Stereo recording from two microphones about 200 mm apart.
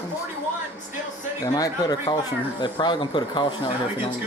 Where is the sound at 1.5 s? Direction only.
20° left (ahead or behind).